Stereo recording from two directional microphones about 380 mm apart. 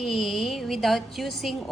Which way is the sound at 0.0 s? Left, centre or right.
Centre.